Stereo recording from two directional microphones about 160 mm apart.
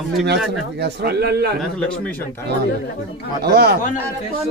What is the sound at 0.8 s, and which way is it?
Speech, 90° right.